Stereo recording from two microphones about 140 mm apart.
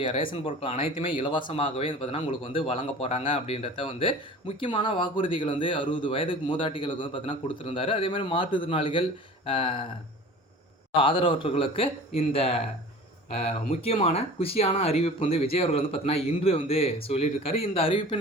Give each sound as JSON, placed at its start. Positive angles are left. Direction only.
{"t": 0.2, "sound": "speech", "side_deg": 35}
{"t": 10.9, "sound": "speech", "side_deg": 35}